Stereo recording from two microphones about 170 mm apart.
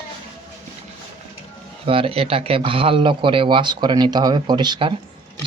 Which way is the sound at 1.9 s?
30° right (ahead or behind).